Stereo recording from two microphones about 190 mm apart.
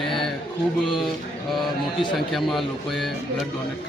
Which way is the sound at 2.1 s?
Centre (ahead or behind).